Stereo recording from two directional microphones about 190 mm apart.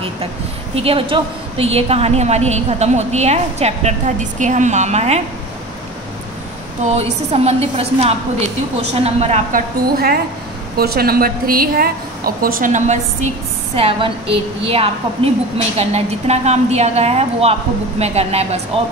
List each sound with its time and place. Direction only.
0.7 s a woman's voice: 30° right (ahead or behind)
7.0 s a woman's voice: 30° right (ahead or behind)